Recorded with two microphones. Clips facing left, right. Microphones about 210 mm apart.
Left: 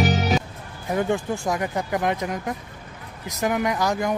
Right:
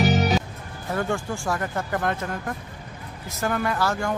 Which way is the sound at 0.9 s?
20° left (ahead or behind).